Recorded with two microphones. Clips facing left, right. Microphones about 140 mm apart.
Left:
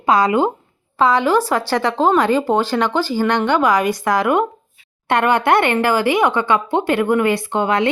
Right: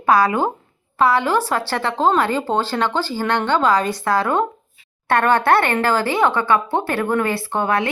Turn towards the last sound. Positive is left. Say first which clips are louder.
# left 3 dB
turn(degrees=20)  # may be behind; listen again after turning